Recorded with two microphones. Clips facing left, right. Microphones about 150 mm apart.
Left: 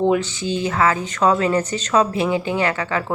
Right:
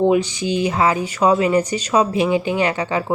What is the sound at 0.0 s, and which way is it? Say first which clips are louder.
Speech: right 2 dB; 15° right (ahead or behind).